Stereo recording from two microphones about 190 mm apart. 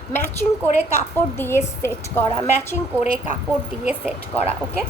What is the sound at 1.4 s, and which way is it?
Speech, 15° left (ahead or behind).